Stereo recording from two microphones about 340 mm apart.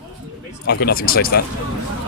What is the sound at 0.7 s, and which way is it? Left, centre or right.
Speech, left.